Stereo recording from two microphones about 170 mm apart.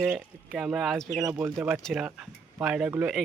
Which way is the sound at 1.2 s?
15° right (ahead or behind).